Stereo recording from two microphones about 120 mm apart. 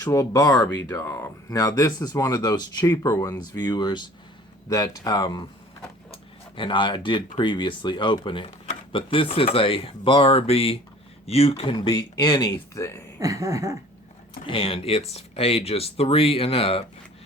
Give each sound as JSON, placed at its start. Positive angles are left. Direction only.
{"t": 0.0, "sound": "speech", "side_deg": 30}
{"t": 6.6, "sound": "speech", "side_deg": 45}
{"t": 11.8, "sound": "speech", "side_deg": 30}
{"t": 13.1, "sound": "a sound", "side_deg": -30}
{"t": 14.4, "sound": "speech", "side_deg": 50}